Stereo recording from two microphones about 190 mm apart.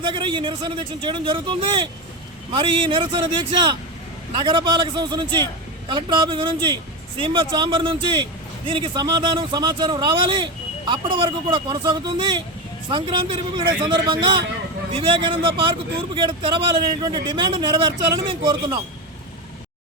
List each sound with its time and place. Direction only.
0.0 s speech: 25° right (ahead or behind)